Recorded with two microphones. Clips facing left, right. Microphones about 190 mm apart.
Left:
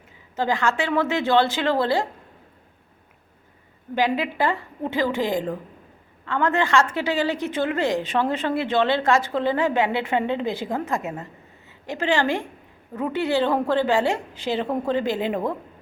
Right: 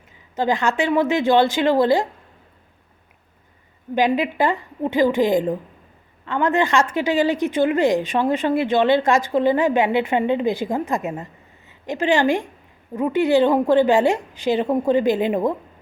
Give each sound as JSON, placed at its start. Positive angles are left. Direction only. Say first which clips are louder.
{"t": 0.3, "sound": "a woman's voice", "louder": "right 3 dB", "side_deg": -20}
{"t": 3.9, "sound": "a woman's voice", "louder": "right 4 dB", "side_deg": -20}